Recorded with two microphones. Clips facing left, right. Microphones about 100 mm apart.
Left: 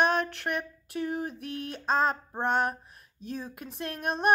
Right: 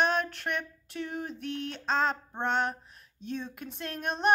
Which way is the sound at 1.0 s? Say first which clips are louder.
Left 4 dB; 35° left (ahead or behind).